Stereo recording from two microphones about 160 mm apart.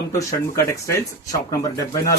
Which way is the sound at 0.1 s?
20° left (ahead or behind).